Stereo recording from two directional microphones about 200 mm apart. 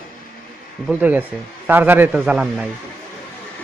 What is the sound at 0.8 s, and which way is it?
A man's voice, 10° right (ahead or behind).